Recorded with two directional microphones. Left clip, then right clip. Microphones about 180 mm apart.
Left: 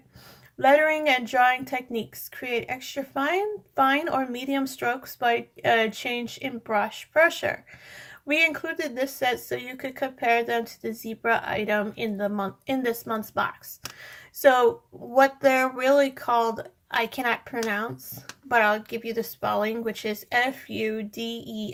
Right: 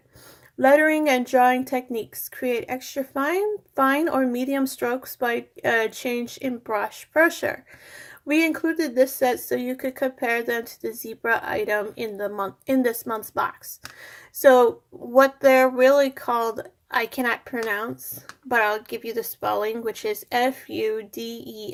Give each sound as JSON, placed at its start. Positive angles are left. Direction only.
{"t": 0.6, "sound": "speech", "side_deg": -45}
{"t": 14.0, "sound": "a sound", "side_deg": -40}
{"t": 15.1, "sound": "speech", "side_deg": -40}